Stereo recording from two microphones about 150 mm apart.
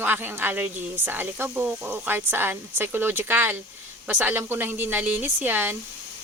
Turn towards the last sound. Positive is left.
turn(degrees=-15)  # may be behind; listen again after turning